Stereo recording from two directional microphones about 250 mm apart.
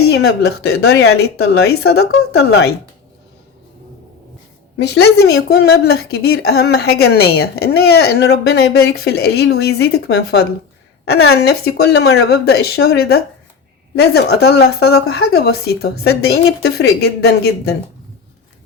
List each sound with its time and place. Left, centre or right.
0.0 s a woman's voice: left
4.8 s a woman's voice: left
5.6 s a woman's voice: left
14.3 s a woman's voice: left